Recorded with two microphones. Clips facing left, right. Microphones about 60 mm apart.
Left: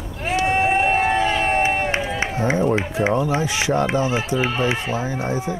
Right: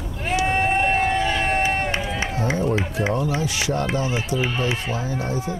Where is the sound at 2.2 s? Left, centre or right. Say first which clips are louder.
Left 4 dB; left.